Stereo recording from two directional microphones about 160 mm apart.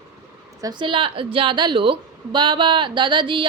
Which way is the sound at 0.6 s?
25° right (ahead or behind).